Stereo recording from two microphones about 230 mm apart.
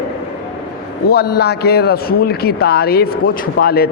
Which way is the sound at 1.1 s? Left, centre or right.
Left.